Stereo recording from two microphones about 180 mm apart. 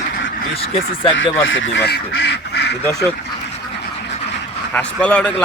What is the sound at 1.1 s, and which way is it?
Speech, 90° left.